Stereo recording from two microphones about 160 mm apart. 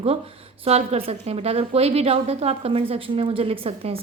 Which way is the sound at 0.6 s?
40° right (ahead or behind).